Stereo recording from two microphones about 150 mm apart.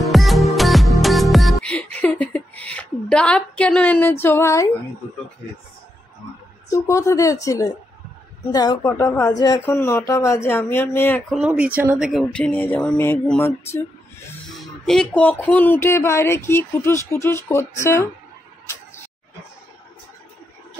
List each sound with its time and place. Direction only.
0.0 s music: centre (ahead or behind); by 4.6 s 20° left (ahead or behind)
6.7 s speech: 20° left (ahead or behind)
11.3 s speech: 10° right (ahead or behind)
12.1 s speech: 5° left (ahead or behind)
14.6 s speech: 5° left (ahead or behind); by 18.0 s 20° left (ahead or behind)